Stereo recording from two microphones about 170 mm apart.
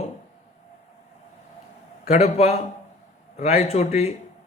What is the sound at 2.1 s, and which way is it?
A man's voice, 40° left (ahead or behind).